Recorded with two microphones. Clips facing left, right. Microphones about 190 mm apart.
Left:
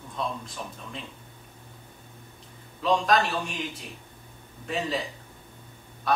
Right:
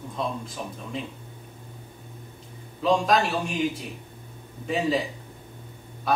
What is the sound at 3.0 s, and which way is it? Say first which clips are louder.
Speech: right 1 dB; centre (ahead or behind).